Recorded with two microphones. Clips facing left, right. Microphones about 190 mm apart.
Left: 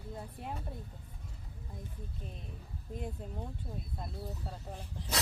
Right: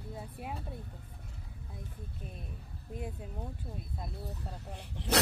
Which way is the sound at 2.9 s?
5° right (ahead or behind).